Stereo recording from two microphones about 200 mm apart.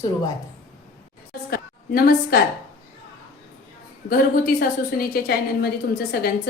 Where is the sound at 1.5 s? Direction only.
50° left (ahead or behind).